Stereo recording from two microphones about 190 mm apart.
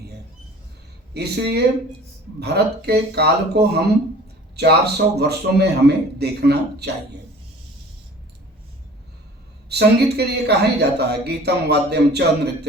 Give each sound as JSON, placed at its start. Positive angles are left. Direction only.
{"t": 1.1, "sound": "speech", "side_deg": -60}
{"t": 9.6, "sound": "speech", "side_deg": -60}